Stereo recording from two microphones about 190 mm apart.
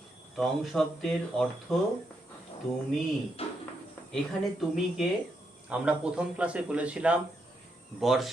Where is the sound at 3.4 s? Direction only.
30° left (ahead or behind).